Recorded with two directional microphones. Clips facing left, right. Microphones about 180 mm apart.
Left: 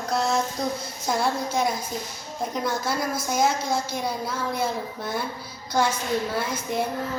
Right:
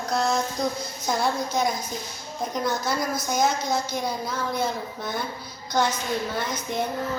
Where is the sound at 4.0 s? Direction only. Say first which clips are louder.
Even; 5° left (ahead or behind).